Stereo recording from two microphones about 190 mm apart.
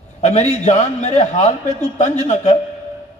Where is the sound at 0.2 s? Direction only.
35° left (ahead or behind).